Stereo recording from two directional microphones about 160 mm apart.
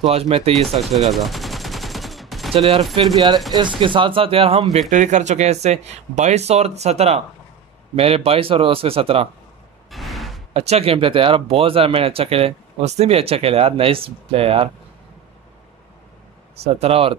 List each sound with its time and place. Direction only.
0.0 s speech: 40° right (ahead or behind)
1.1 s gunshot: centre (ahead or behind)
2.5 s speech: 35° right (ahead or behind)
4.7 s speech: 50° right (ahead or behind)
9.8 s a sound: centre (ahead or behind)
10.5 s speech: 40° right (ahead or behind)
16.5 s speech: 40° right (ahead or behind)